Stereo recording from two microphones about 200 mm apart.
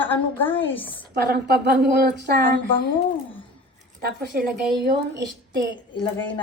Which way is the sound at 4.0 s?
50° right (ahead or behind).